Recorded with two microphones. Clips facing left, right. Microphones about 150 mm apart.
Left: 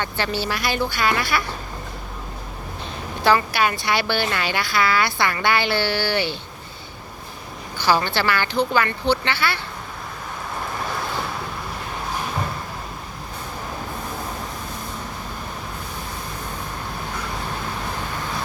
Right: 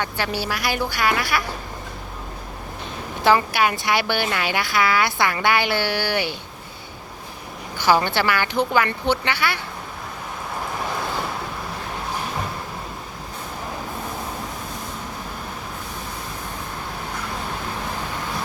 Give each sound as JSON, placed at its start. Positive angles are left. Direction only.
{"t": 0.0, "sound": "a woman's voice", "side_deg": -10}
{"t": 3.2, "sound": "a woman's voice", "side_deg": -15}
{"t": 7.9, "sound": "a woman's voice", "side_deg": -15}